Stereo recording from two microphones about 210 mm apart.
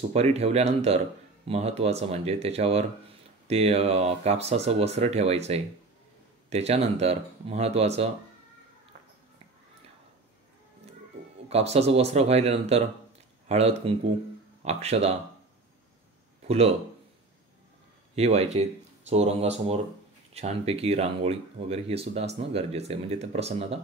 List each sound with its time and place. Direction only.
0.1 s speech: 30° right (ahead or behind)
11.4 s speech: 30° right (ahead or behind)
16.4 s speech: 30° right (ahead or behind)
18.1 s speech: 30° right (ahead or behind)